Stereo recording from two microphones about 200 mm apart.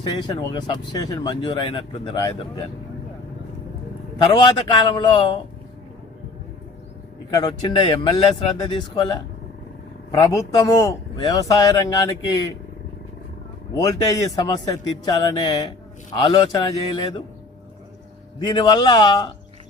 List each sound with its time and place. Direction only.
0.0 s speech: 20° left (ahead or behind)
4.2 s speech: 25° left (ahead or behind)
7.3 s speech: 25° left (ahead or behind)
13.7 s speech: 15° left (ahead or behind)
18.3 s speech: 20° left (ahead or behind)